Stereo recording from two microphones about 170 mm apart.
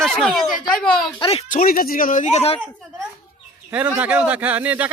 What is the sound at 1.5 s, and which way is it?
A man's voice, 55° left (ahead or behind).